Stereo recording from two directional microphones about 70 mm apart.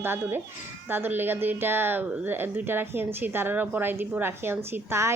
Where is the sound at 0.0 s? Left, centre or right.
Right.